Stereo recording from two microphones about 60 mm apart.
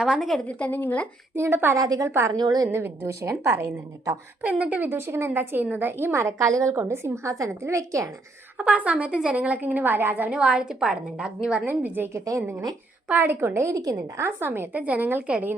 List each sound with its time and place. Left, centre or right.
0.0 s a woman's voice: centre
0.4 s a woman's voice: left
1.7 s a woman's voice: right
2.0 s a woman's voice: right
3.1 s a woman's voice: right
4.4 s a woman's voice: right
4.9 s a woman's voice: right
6.7 s a woman's voice: right
8.5 s a woman's voice: right
10.2 s a woman's voice: centre
11.6 s a woman's voice: right
12.1 s speech: right
12.4 s a woman's voice: right
14.7 s a woman's voice: right